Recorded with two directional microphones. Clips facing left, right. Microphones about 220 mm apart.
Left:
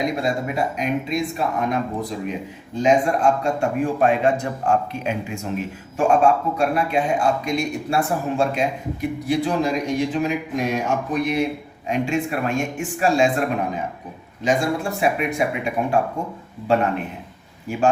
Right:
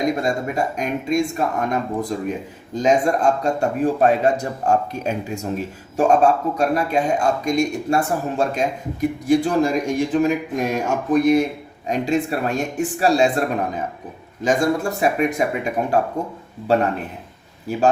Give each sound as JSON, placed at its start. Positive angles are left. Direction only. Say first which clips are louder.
{"t": 0.0, "sound": "a man's voice", "louder": "right 2 dB", "side_deg": -45}
{"t": 14.4, "sound": "speech", "louder": "right 2 dB", "side_deg": -45}